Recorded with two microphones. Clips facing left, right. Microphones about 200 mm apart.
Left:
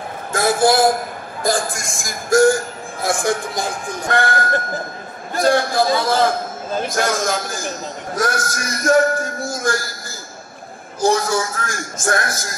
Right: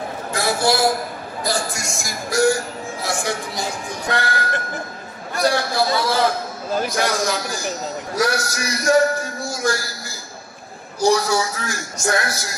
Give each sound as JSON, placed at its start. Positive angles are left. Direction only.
{"t": 0.3, "sound": "a sound", "side_deg": 50}
{"t": 1.4, "sound": "speech", "side_deg": 50}
{"t": 11.0, "sound": "speech", "side_deg": 50}